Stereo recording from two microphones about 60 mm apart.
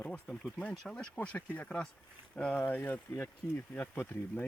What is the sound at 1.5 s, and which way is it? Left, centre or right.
Speech, centre.